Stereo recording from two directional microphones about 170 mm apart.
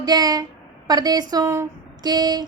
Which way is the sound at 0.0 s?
25° right (ahead or behind).